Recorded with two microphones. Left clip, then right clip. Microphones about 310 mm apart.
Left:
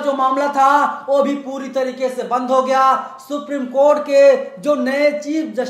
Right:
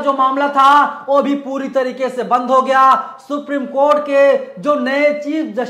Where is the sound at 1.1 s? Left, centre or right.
Right.